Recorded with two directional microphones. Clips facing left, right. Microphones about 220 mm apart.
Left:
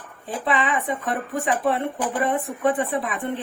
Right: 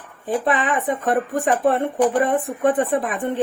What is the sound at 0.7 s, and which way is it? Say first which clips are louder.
A woman's voice: right 5 dB; 50° right (ahead or behind).